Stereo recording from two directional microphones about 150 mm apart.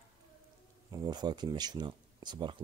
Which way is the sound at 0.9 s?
30° right (ahead or behind).